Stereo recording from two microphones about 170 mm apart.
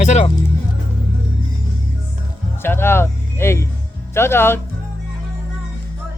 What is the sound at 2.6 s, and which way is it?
Speech, 15° left (ahead or behind).